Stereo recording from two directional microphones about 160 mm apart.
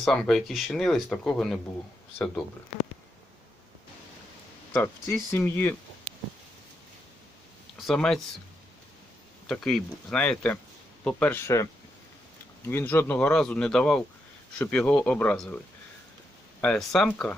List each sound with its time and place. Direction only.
0.0 s speech: 5° left (ahead or behind)
4.7 s speech: 15° left (ahead or behind)
7.8 s speech: centre (ahead or behind)
9.5 s speech: 5° left (ahead or behind)